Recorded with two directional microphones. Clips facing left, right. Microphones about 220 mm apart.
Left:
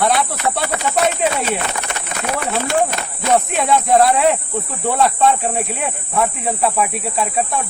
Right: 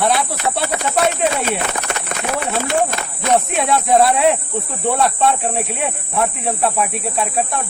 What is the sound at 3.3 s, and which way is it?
Speech, centre (ahead or behind).